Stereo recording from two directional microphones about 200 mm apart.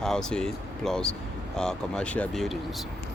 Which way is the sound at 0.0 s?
5° left (ahead or behind).